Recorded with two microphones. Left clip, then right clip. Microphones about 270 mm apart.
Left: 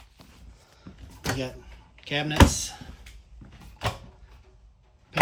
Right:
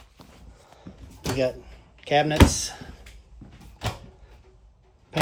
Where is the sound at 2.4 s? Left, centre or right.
Centre.